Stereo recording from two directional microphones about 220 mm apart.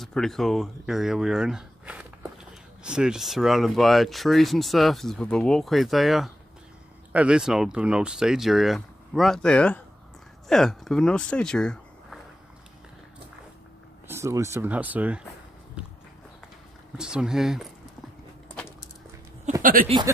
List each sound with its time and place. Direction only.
0.0 s speech: centre (ahead or behind)
14.0 s speech: 15° right (ahead or behind)
16.9 s speech: 5° right (ahead or behind)
19.6 s speech: 40° right (ahead or behind)